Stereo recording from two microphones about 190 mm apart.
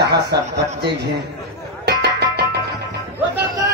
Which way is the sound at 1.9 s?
60° right (ahead or behind).